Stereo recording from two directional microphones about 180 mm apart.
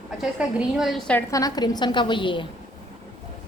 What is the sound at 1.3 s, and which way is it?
A woman's voice, 20° left (ahead or behind).